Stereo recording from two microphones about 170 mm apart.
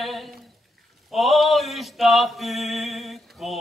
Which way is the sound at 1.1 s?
Centre (ahead or behind).